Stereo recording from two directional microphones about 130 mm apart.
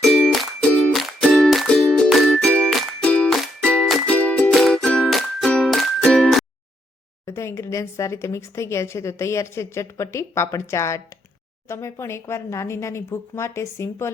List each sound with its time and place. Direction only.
0.0 s music: centre (ahead or behind)
7.3 s speech: 20° left (ahead or behind)